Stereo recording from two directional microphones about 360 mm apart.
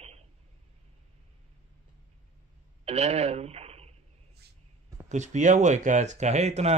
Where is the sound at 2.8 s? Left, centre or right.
Centre.